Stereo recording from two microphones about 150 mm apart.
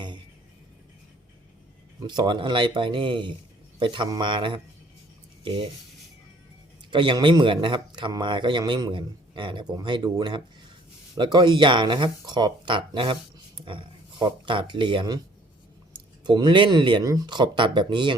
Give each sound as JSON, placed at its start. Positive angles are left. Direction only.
{"t": 2.0, "sound": "speech", "side_deg": -30}
{"t": 5.4, "sound": "a sound", "side_deg": -30}
{"t": 6.9, "sound": "speech", "side_deg": -30}